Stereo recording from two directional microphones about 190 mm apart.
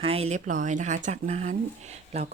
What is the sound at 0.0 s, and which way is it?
Speech, 30° right (ahead or behind).